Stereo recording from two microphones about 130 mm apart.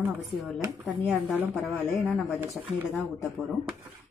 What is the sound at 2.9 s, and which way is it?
Speech, 15° right (ahead or behind).